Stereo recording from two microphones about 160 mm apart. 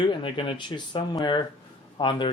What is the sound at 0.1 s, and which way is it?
Speech, 30° left (ahead or behind).